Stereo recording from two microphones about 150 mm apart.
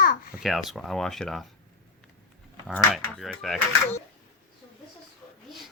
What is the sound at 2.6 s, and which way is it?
Speech, 5° left (ahead or behind).